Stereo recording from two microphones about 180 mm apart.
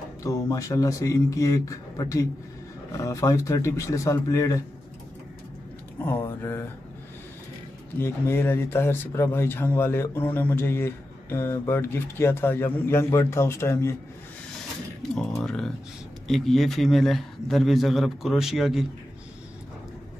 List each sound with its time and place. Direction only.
0.2 s speech: 20° left (ahead or behind)
5.9 s speech: 10° left (ahead or behind)
8.0 s speech: 15° left (ahead or behind)
15.4 s a man's voice: 5° left (ahead or behind)